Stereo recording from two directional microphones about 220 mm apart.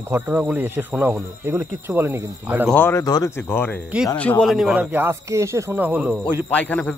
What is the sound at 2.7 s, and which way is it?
Speech, 10° left (ahead or behind).